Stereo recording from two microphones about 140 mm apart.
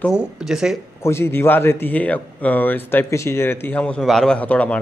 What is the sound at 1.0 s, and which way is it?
Speech, 20° left (ahead or behind).